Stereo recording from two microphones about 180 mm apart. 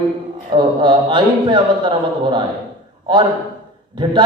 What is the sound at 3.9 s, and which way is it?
Speech, 25° right (ahead or behind).